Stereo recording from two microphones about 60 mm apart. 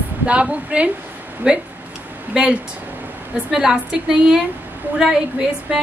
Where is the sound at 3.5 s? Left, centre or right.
Centre.